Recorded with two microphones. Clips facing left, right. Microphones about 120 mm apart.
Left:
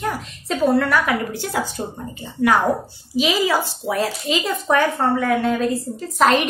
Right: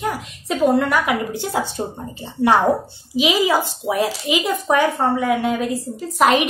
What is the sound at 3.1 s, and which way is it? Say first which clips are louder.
A woman's voice: right 1 dB; 15° right (ahead or behind).